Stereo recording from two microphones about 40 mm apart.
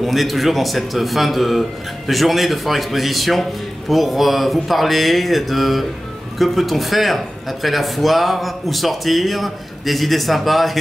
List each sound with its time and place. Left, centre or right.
0.0 s speech: centre